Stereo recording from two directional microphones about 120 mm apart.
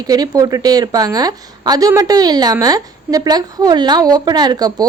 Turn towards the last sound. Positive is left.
turn(degrees=-35)  # may be behind; listen again after turning